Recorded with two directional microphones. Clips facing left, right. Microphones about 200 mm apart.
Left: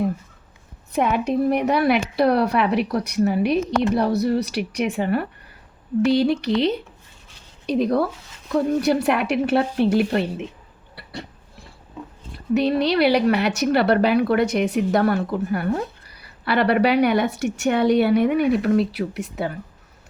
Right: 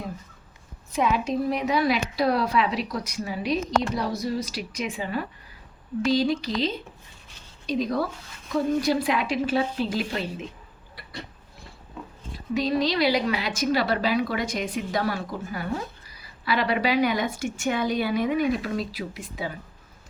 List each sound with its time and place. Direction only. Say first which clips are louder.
0.9 s a woman's voice: left 4 dB; 60° left (ahead or behind)
12.5 s a woman's voice: left 5 dB; 65° left (ahead or behind)